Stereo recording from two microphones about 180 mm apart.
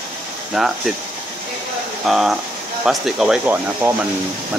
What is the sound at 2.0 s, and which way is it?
Speech, centre (ahead or behind).